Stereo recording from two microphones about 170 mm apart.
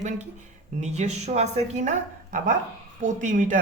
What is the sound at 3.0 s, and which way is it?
Speech, 50° right (ahead or behind).